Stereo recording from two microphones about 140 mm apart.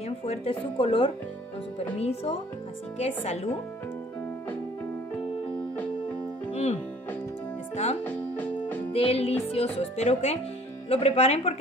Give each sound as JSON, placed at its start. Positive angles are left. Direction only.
{"t": 0.2, "sound": "speech", "side_deg": 45}
{"t": 6.5, "sound": "music", "side_deg": 45}
{"t": 8.0, "sound": "keyboard", "side_deg": 10}
{"t": 8.9, "sound": "speech", "side_deg": 40}